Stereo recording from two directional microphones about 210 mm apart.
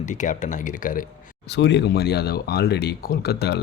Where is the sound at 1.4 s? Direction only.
55° left (ahead or behind).